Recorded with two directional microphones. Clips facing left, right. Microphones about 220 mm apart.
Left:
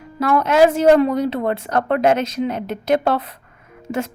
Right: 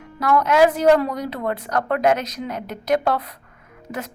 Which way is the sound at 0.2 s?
25° left (ahead or behind).